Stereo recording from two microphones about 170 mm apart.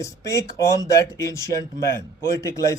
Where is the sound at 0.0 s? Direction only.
20° left (ahead or behind).